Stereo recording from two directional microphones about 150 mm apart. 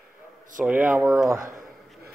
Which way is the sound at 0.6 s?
10° right (ahead or behind).